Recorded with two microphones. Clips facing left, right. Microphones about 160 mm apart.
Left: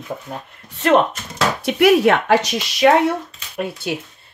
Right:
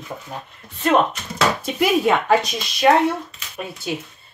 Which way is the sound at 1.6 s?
70° left (ahead or behind).